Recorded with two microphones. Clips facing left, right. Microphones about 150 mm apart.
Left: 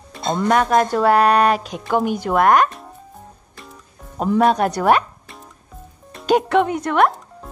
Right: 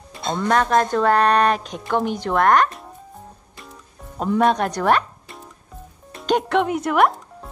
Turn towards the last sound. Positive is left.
turn(degrees=0)  # may be behind; listen again after turning